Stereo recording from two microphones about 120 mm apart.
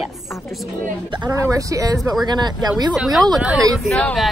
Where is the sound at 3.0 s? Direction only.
Centre (ahead or behind).